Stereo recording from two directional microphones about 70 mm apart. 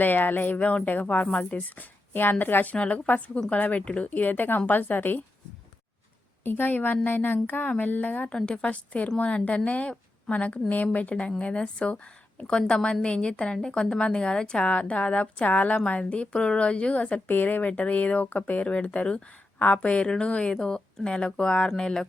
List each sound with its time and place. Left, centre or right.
0.0 s speech: left
6.4 s speech: left
8.3 s a woman's voice: centre